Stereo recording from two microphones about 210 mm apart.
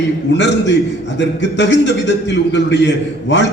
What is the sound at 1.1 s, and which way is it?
A man's voice, 55° left (ahead or behind).